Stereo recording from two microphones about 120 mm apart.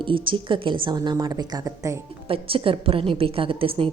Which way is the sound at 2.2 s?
50° right (ahead or behind).